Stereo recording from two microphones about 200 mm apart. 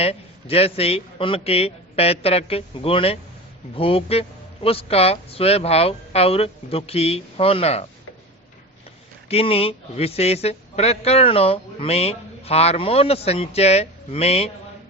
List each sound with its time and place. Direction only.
0.0 s a man's voice: 30° left (ahead or behind)
9.3 s speech: 30° left (ahead or behind)